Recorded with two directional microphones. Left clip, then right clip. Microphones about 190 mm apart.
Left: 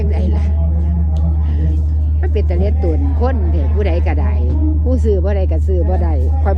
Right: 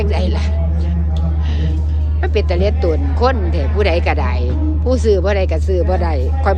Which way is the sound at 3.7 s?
20° right (ahead or behind).